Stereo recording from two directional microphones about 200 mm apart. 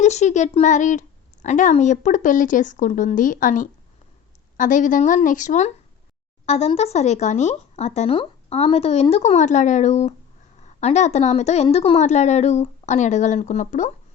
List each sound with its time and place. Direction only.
0.0 s speech: 35° left (ahead or behind)